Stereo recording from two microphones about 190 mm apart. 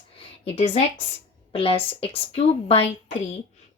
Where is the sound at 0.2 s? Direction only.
30° left (ahead or behind).